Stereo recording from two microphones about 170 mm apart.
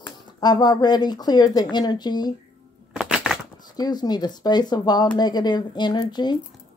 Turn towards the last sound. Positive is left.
turn(degrees=25)  # may be behind; listen again after turning